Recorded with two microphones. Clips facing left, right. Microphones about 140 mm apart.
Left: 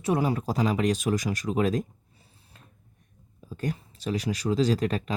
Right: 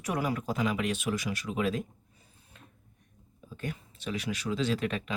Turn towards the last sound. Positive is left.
turn(degrees=35)  # may be behind; listen again after turning